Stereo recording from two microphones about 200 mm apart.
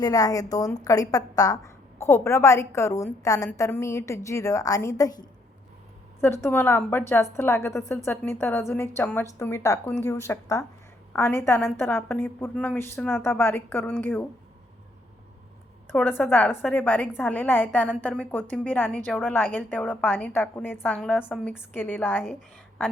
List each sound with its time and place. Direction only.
0.0 s a woman's voice: 20° left (ahead or behind)
15.9 s a woman's voice: 10° left (ahead or behind)
21.7 s a woman's voice: 10° left (ahead or behind)